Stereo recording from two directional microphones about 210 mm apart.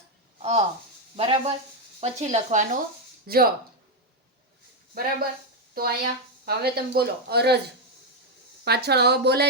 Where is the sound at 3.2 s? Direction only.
45° right (ahead or behind).